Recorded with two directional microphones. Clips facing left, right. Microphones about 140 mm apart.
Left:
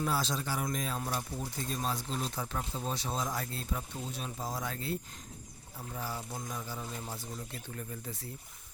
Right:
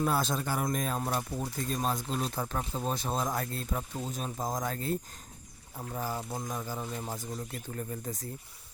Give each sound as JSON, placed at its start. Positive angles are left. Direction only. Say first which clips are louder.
{"t": 0.0, "sound": "speech", "louder": "right 4 dB", "side_deg": -50}